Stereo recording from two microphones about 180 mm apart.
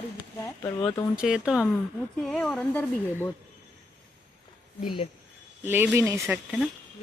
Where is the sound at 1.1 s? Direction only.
5° right (ahead or behind).